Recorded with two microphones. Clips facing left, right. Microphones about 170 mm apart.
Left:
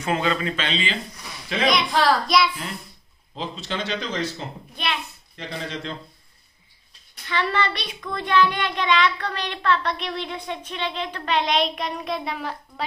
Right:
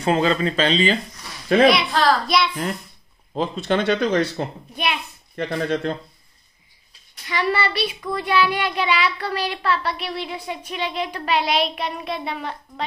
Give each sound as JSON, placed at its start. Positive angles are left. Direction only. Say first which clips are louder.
{"t": 0.0, "sound": "speech", "louder": "right 5 dB", "side_deg": -35}
{"t": 1.9, "sound": "a child's voice", "louder": "right 1 dB", "side_deg": 10}
{"t": 2.2, "sound": "speech", "louder": "even", "side_deg": 0}
{"t": 3.3, "sound": "speech", "louder": "right 8 dB", "side_deg": -55}
{"t": 7.2, "sound": "speech", "louder": "right 2 dB", "side_deg": -10}